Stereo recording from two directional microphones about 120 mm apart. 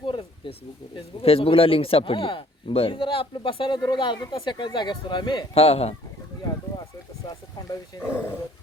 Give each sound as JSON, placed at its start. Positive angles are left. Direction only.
{"t": 0.0, "sound": "snake", "side_deg": 45}
{"t": 0.9, "sound": "speech", "side_deg": 55}
{"t": 5.5, "sound": "speech", "side_deg": 55}
{"t": 6.4, "sound": "a sound", "side_deg": 30}
{"t": 7.3, "sound": "wild animals", "side_deg": 30}